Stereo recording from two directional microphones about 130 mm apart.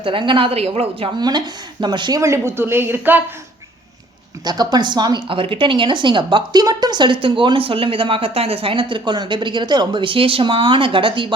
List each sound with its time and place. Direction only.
0.0 s a woman's voice: 40° right (ahead or behind)
1.2 s a woman's voice: 35° right (ahead or behind); by 3.2 s 15° right (ahead or behind)
4.4 s a woman's voice: 30° right (ahead or behind)